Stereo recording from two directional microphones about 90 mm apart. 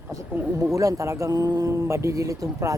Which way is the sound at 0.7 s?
40° right (ahead or behind).